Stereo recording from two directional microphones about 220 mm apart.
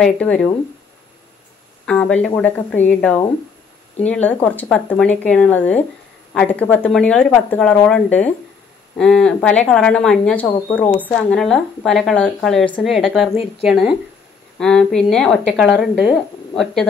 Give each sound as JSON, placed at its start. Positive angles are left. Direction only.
{"t": 0.0, "sound": "speech", "side_deg": 5}
{"t": 1.9, "sound": "speech", "side_deg": 5}
{"t": 13.3, "sound": "speech", "side_deg": 30}
{"t": 13.7, "sound": "speech", "side_deg": -5}